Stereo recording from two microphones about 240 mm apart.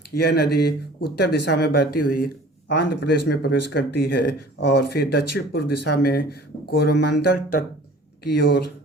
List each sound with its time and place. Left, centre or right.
0.2 s speech: left
2.0 s speech: left
2.2 s speech: left